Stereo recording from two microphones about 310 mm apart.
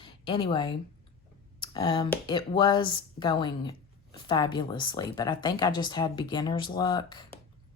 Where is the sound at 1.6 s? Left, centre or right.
Centre.